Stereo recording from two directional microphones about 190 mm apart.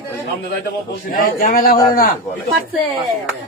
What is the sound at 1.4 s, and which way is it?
Speech, 45° left (ahead or behind).